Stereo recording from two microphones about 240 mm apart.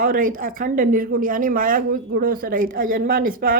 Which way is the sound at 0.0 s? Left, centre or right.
Right.